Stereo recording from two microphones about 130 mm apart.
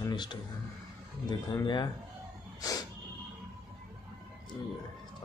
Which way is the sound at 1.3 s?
35° left (ahead or behind).